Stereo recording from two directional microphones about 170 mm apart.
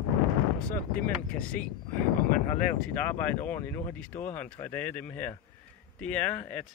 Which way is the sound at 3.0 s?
10° left (ahead or behind).